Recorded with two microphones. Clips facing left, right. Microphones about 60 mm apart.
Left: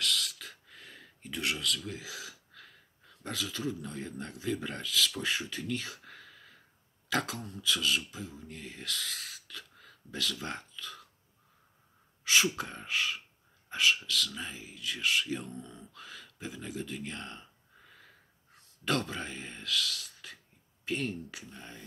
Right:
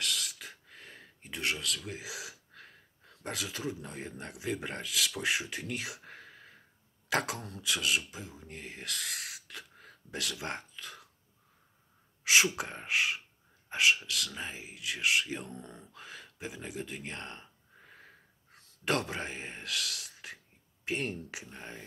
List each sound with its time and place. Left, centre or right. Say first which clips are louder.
0.0 s a sound: left 2 dB; centre
1.7 s speech: left 2 dB; centre
2.5 s a sound: right 1 dB; right
3.8 s speech: left 2 dB; right
6.0 s a sound: right 1 dB; right
7.3 s speech: left 1 dB; right
7.6 s speech: left 1 dB; right
10.8 s burping: left 1 dB; right
12.4 s speech: right 1 dB; centre
16.3 s speech: left 1 dB; centre
16.9 s speech: left 2 dB; right
17.3 s a sound: even; right
18.9 s speech: even; right